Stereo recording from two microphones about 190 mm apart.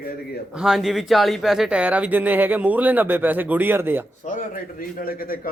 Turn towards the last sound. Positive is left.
turn(degrees=50)  # may be behind; listen again after turning